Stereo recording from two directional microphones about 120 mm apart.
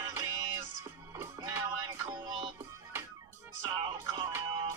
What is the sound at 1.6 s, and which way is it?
Music, 35° right (ahead or behind).